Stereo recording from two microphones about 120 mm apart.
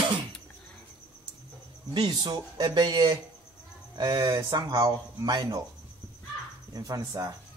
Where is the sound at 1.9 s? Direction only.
35° right (ahead or behind).